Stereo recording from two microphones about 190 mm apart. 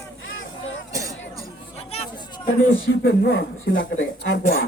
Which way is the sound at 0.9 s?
15° right (ahead or behind).